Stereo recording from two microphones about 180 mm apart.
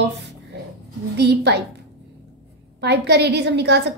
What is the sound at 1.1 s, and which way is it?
Speech, 65° right (ahead or behind).